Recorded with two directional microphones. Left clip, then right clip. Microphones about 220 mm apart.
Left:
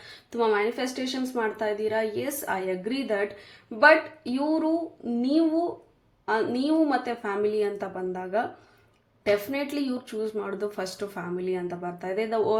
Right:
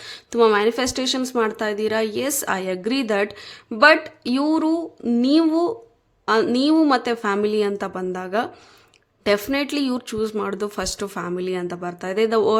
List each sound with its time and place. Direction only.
0.0 s speech: 40° right (ahead or behind)